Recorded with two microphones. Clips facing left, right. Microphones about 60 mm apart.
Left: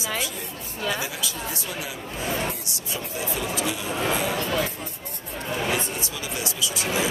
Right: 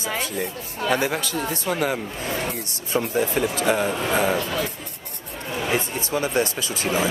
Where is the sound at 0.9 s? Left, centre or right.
Right.